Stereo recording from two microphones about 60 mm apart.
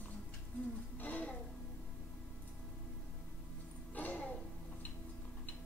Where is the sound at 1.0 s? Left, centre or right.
Left.